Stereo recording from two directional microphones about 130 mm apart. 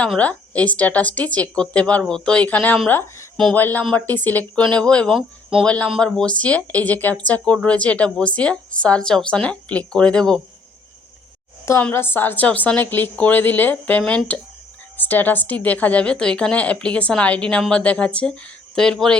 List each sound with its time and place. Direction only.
0.2 s speech: 10° left (ahead or behind)
11.8 s speech: 15° left (ahead or behind)